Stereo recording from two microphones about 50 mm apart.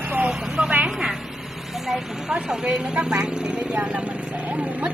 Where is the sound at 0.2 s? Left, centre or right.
Right.